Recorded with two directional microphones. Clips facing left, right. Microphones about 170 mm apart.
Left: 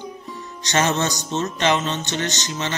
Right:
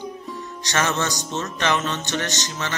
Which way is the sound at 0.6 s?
25° left (ahead or behind).